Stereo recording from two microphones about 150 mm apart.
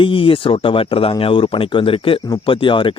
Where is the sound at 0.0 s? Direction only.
35° left (ahead or behind).